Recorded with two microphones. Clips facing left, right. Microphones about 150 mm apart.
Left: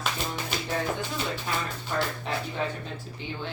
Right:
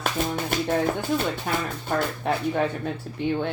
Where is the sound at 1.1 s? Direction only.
55° right (ahead or behind).